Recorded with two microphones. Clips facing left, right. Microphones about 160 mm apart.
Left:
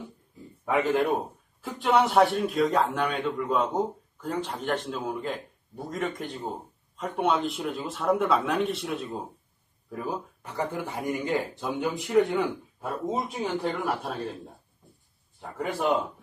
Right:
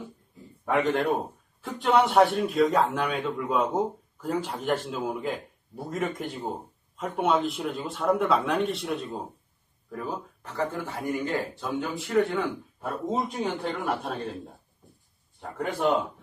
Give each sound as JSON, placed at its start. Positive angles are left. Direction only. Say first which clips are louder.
{"t": 0.7, "sound": "a man's voice", "louder": "even", "side_deg": 0}
{"t": 13.3, "sound": "a man's voice", "louder": "left 1 dB", "side_deg": 0}
{"t": 15.4, "sound": "a man's voice", "louder": "right 1 dB", "side_deg": 0}